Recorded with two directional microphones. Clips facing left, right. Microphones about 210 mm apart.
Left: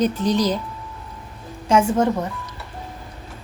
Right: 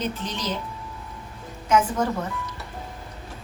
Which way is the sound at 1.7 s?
25° left (ahead or behind).